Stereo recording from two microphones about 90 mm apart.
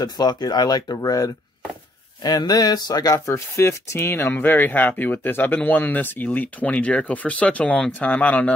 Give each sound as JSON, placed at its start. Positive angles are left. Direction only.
{"t": 0.0, "sound": "speech", "side_deg": 50}